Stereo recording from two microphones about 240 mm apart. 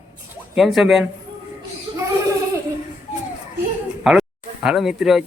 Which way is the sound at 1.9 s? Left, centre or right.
Centre.